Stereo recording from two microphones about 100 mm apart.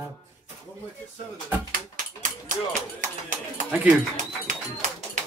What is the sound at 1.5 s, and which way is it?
Music, 20° right (ahead or behind).